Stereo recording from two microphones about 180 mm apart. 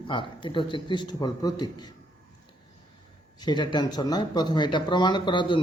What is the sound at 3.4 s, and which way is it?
A man's voice, 25° left (ahead or behind).